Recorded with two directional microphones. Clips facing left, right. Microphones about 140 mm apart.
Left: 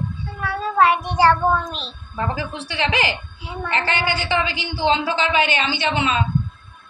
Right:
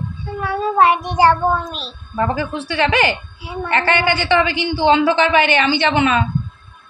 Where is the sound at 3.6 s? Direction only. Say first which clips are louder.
Right 5 dB; 65° right (ahead or behind).